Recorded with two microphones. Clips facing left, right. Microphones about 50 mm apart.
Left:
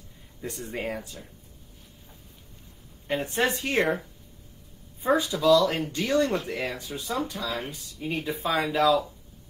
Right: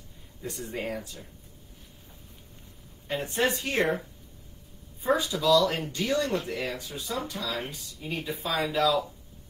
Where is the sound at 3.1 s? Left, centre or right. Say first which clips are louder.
Left 1 dB; left.